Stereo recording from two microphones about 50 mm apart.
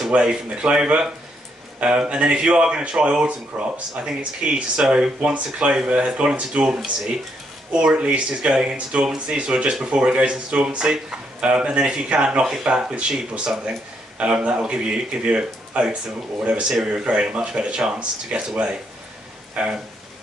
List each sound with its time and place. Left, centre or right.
0.1 s speech: centre